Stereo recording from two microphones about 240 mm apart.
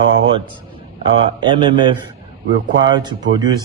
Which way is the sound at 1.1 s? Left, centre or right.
Centre.